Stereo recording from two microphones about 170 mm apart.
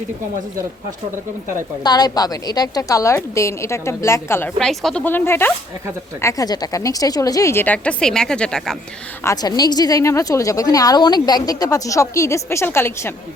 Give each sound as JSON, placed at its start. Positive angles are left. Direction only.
{"t": 1.8, "sound": "a woman's voice", "side_deg": 25}
{"t": 4.5, "sound": "a woman's voice", "side_deg": 0}
{"t": 9.2, "sound": "a woman's voice", "side_deg": 20}